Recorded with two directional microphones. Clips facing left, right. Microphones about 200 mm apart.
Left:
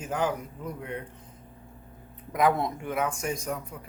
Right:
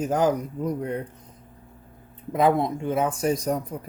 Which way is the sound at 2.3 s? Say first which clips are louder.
Right 4 dB; 25° right (ahead or behind).